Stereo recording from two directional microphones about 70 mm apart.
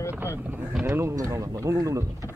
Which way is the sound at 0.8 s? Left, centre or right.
Right.